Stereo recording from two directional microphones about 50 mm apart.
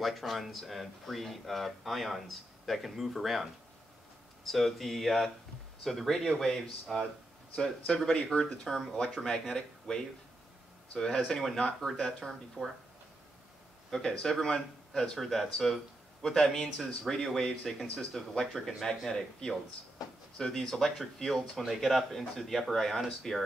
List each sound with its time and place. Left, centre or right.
0.0 s speech: centre
4.5 s speech: centre
8.5 s speech: centre
11.1 s speech: centre
12.6 s speech: centre
13.8 s speech: centre